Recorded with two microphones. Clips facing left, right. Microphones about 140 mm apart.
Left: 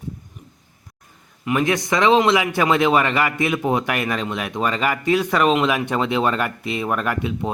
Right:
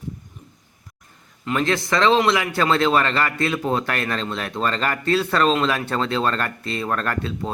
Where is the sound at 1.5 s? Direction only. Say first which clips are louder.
Left 2 dB; 15° left (ahead or behind).